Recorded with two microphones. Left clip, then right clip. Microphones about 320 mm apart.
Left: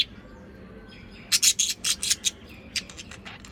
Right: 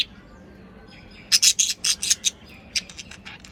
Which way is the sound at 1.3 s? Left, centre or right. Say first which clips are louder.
Right 4 dB; centre.